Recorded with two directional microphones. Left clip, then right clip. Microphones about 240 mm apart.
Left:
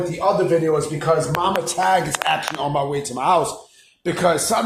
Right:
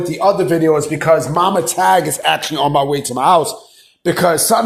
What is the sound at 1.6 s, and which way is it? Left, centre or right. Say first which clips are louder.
Speech: right 6 dB; right.